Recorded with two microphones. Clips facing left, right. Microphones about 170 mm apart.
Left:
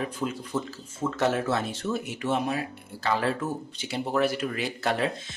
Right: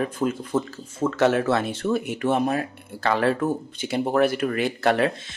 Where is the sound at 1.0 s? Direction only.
70° right (ahead or behind).